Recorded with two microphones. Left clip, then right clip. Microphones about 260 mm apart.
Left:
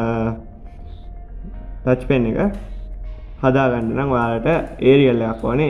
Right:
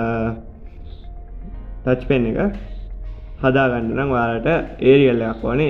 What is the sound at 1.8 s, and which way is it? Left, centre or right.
A man's voice, left.